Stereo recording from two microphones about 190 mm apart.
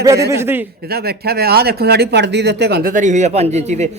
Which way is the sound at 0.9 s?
55° right (ahead or behind).